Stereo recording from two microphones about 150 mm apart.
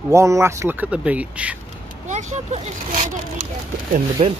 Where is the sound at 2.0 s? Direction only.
50° right (ahead or behind).